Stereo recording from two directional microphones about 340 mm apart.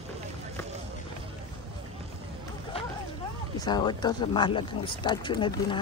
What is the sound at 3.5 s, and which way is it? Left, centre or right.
Speech, centre.